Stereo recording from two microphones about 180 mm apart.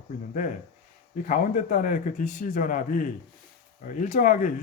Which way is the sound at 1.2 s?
45° left (ahead or behind).